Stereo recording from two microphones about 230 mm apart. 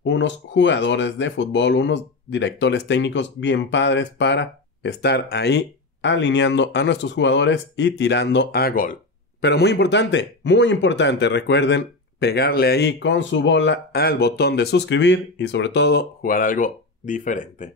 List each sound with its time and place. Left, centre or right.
0.0 s speech: left